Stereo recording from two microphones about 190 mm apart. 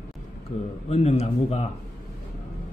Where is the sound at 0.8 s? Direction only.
35° left (ahead or behind).